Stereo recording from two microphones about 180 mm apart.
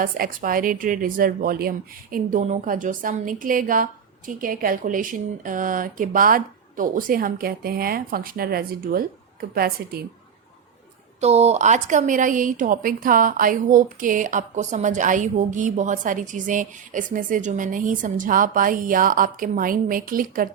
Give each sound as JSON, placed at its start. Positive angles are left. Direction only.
{"t": 0.0, "sound": "a woman's voice", "side_deg": -50}
{"t": 11.2, "sound": "a woman's voice", "side_deg": -35}